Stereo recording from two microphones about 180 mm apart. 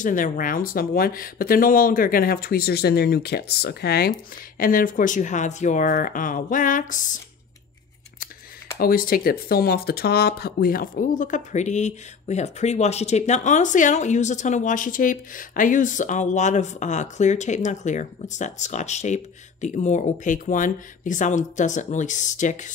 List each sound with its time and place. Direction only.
0.0 s speech: 45° left (ahead or behind)
4.6 s speech: 50° left (ahead or behind)
8.7 s speech: 55° left (ahead or behind)